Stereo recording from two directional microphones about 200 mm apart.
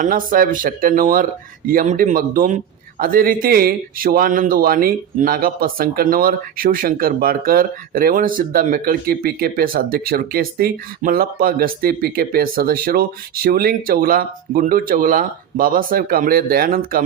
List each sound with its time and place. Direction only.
0.0 s speech: 45° right (ahead or behind)